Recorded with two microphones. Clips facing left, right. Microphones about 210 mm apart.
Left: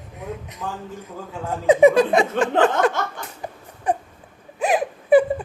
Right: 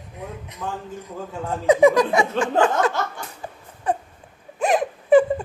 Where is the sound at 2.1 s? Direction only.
55° left (ahead or behind).